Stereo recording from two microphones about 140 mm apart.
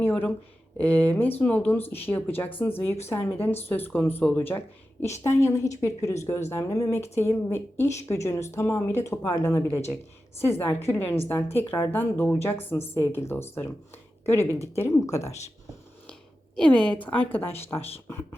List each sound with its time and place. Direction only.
0.0 s speech: 15° left (ahead or behind)
16.6 s speech: 5° left (ahead or behind)